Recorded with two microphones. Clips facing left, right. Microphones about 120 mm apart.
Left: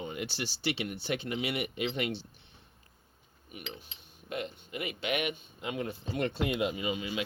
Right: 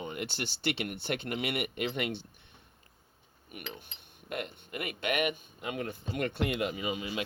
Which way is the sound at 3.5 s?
55° right (ahead or behind).